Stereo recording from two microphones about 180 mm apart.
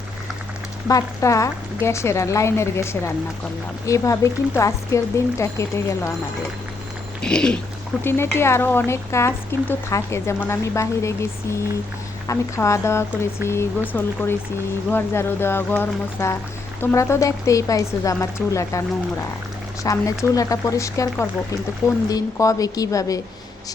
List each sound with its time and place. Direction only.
0.9 s speech: 20° left (ahead or behind)
7.2 s speech: 5° left (ahead or behind)
12.3 s speech: 15° left (ahead or behind)
19.8 s a woman's voice: 20° left (ahead or behind)